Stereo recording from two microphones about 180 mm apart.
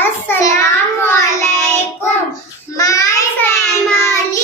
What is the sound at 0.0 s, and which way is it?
Child singing, 15° left (ahead or behind).